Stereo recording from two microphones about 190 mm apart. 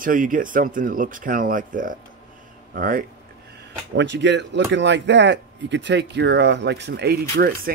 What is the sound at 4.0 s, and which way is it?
Speech, 70° right (ahead or behind).